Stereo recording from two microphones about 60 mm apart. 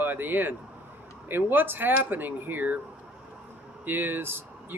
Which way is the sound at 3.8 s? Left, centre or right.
Right.